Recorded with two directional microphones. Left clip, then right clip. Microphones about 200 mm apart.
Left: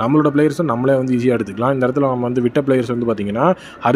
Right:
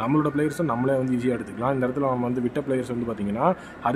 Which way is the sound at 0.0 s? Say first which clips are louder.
Left 9 dB; 25° left (ahead or behind).